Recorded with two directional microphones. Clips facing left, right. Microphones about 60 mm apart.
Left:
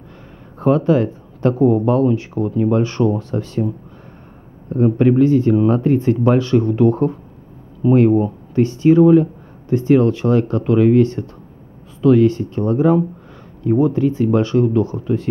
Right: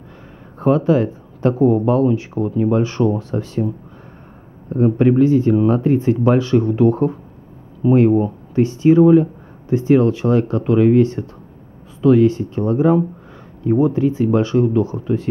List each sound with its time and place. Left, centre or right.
0.6 s speech: centre